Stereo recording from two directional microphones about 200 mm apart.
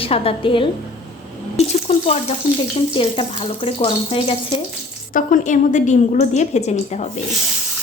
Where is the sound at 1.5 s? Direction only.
30° left (ahead or behind).